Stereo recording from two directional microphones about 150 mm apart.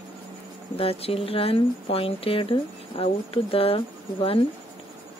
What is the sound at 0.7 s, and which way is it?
Speech, 40° left (ahead or behind).